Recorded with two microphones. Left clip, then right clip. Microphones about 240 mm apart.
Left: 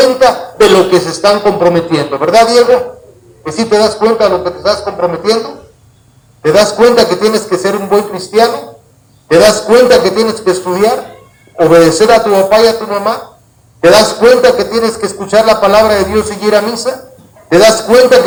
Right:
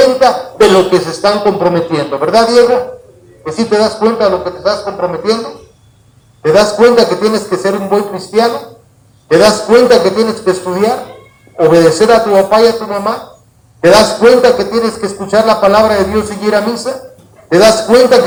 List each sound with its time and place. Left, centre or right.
0.0 s a man's voice: left
6.4 s a man's voice: left